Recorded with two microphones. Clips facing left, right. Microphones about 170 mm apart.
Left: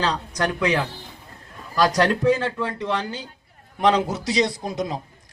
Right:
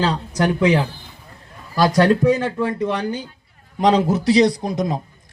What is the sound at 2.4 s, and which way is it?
Speech, 15° right (ahead or behind).